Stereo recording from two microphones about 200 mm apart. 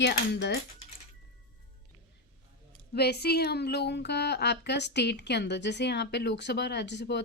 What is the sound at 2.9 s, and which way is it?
A woman's voice, 55° left (ahead or behind).